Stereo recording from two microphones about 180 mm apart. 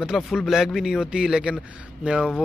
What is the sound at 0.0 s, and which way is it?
Speech, centre (ahead or behind).